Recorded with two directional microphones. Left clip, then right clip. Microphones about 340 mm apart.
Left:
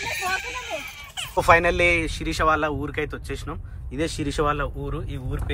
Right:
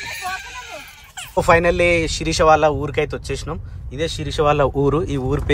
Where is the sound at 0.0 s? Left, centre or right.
Centre.